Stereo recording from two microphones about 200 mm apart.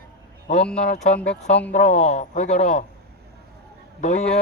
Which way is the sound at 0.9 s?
35° left (ahead or behind).